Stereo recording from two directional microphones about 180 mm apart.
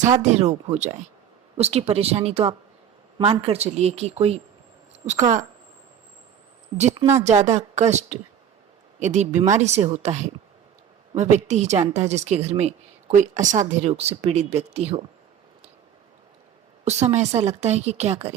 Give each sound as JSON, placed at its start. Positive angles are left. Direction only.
{"t": 0.2, "sound": "speech", "side_deg": -35}
{"t": 5.0, "sound": "a woman's voice", "side_deg": -15}
{"t": 7.3, "sound": "speech", "side_deg": -40}
{"t": 16.8, "sound": "speech", "side_deg": -40}